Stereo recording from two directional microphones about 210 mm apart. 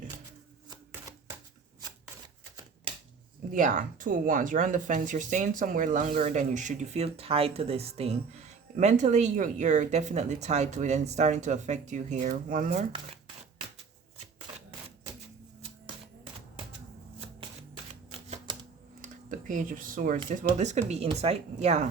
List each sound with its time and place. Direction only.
3.5 s speech: 35° right (ahead or behind)
18.1 s typewriter: 25° right (ahead or behind)
19.0 s a sound: 40° right (ahead or behind)
20.3 s speech: 35° right (ahead or behind)